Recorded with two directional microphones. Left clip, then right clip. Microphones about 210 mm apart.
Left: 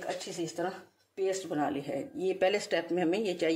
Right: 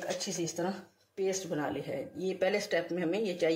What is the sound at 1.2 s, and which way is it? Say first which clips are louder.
A woman's voice: left 2 dB; 45° left (ahead or behind).